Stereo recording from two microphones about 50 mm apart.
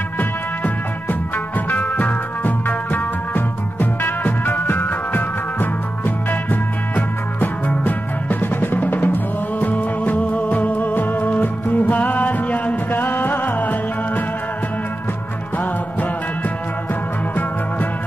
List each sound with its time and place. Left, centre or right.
1.7 s music: left
12.9 s music: left